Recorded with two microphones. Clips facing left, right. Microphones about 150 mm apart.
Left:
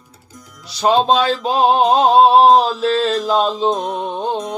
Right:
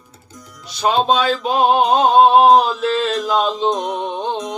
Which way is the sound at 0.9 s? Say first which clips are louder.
Left 2 dB; 30° left (ahead or behind).